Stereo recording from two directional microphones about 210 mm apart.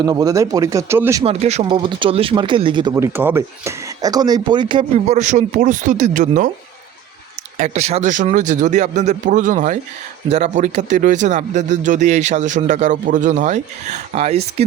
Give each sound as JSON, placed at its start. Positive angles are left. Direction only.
{"t": 0.0, "sound": "speech", "side_deg": -20}
{"t": 1.2, "sound": "speech", "side_deg": -30}
{"t": 2.9, "sound": "speech", "side_deg": -10}
{"t": 7.6, "sound": "speech", "side_deg": -30}